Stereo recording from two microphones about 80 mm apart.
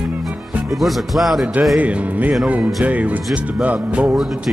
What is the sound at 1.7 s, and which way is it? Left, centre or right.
Speech, centre.